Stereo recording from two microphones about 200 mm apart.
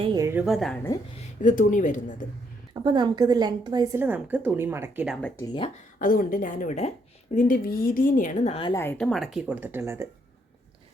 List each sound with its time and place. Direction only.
0.0 s a woman's voice: 20° right (ahead or behind)
0.4 s speech: centre (ahead or behind)
1.4 s a woman's voice: 40° left (ahead or behind)
2.8 s a woman's voice: 20° right (ahead or behind); by 5.3 s centre (ahead or behind)
6.0 s a woman's voice: 45° left (ahead or behind)
8.5 s a woman's voice: 25° left (ahead or behind)
8.8 s speech: 10° left (ahead or behind); by 10.1 s 10° right (ahead or behind)